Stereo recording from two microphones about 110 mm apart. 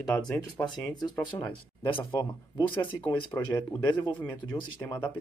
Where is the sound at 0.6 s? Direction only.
25° left (ahead or behind).